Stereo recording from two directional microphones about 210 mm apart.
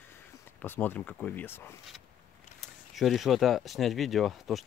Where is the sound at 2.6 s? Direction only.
Centre (ahead or behind).